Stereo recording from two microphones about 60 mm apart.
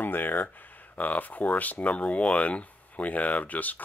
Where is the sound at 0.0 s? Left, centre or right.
Left.